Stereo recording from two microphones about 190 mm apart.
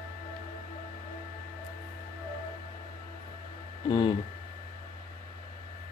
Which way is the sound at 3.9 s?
25° left (ahead or behind).